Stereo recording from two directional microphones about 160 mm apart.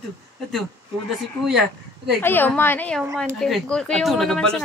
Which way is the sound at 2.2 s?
10° left (ahead or behind).